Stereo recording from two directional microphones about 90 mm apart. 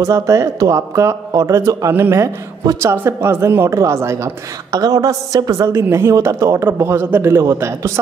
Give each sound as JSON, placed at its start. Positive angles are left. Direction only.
{"t": 0.0, "sound": "speech", "side_deg": -35}
{"t": 4.6, "sound": "a man's voice", "side_deg": -45}